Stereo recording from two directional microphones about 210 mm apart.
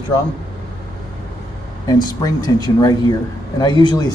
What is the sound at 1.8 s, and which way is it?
A man's voice, 15° left (ahead or behind).